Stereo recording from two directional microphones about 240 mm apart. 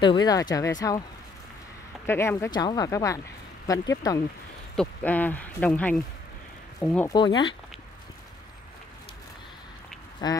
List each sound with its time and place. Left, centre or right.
0.0 s speech: centre
2.0 s speech: centre
7.1 s speech: centre
10.2 s speech: centre